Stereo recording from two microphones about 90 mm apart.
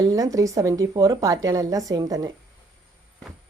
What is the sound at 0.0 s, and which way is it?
A woman's voice, 40° right (ahead or behind).